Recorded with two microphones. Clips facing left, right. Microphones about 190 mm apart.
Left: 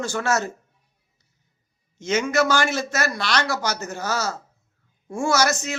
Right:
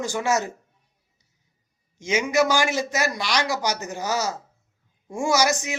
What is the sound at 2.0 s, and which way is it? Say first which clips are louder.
A man's voice: even; 10° right (ahead or behind).